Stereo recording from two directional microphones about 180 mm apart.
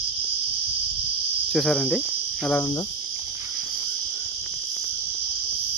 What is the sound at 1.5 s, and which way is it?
Speech, 5° left (ahead or behind).